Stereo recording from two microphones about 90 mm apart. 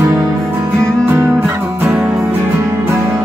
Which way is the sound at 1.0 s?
25° right (ahead or behind).